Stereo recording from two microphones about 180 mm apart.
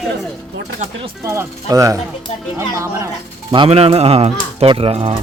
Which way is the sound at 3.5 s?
30° right (ahead or behind).